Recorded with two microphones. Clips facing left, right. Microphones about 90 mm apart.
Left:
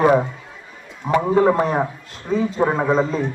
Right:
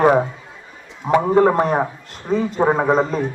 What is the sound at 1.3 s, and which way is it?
A man's voice, 30° right (ahead or behind).